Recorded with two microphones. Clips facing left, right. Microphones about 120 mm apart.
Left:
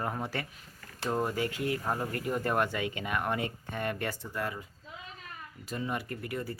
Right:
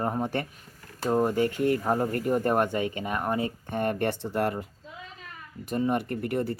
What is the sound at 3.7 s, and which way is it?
Speech, 50° right (ahead or behind).